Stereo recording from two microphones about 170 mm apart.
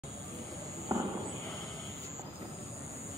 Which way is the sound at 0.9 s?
20° right (ahead or behind).